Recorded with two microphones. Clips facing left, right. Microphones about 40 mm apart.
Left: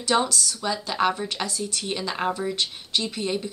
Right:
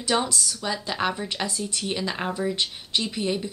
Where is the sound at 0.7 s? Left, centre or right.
Centre.